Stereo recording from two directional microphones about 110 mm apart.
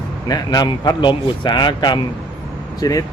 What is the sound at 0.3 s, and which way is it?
A man's voice, 35° left (ahead or behind).